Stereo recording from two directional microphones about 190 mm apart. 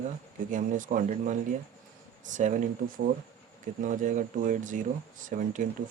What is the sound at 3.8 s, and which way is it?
Speech, 40° right (ahead or behind).